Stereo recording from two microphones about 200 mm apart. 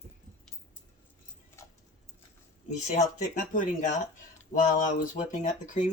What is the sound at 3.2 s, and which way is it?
Speech, 40° left (ahead or behind).